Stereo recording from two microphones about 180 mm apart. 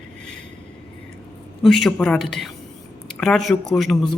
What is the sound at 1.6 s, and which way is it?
A woman's voice, centre (ahead or behind).